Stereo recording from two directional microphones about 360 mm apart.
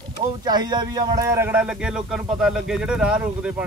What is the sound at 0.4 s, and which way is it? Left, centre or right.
Speech, centre.